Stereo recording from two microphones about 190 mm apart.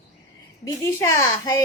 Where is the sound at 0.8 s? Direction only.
15° left (ahead or behind).